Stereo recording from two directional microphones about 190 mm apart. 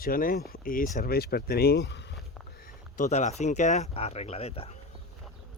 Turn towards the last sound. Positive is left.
turn(degrees=30)  # may be behind; listen again after turning